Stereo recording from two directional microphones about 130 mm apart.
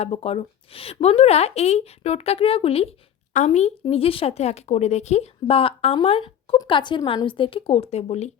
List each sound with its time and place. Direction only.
0.0 s speech: 50° left (ahead or behind)
3.3 s speech: 60° left (ahead or behind)